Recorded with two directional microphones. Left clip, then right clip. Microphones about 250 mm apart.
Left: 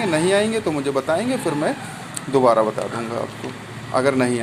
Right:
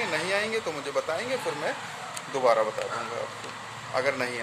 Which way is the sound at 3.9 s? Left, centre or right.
Centre.